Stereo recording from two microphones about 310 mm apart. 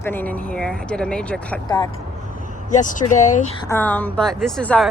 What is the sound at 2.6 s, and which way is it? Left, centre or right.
Speech, left.